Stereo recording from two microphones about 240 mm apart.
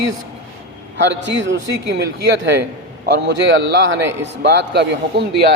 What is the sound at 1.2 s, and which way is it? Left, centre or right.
A man's voice, right.